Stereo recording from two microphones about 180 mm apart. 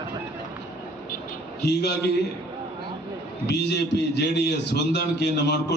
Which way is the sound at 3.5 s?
70° left (ahead or behind).